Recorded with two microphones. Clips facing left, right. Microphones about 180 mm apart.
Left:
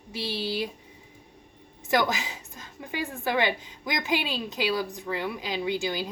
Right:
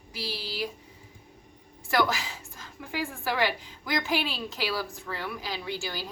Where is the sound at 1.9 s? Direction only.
20° left (ahead or behind).